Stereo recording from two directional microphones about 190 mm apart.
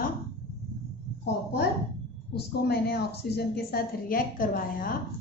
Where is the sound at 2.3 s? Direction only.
55° left (ahead or behind).